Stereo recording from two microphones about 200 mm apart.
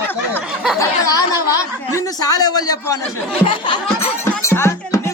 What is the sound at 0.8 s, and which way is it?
A man's voice, 15° left (ahead or behind).